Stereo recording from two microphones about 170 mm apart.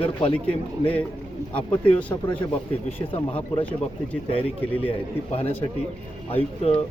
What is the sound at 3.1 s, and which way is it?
Speech, 35° left (ahead or behind).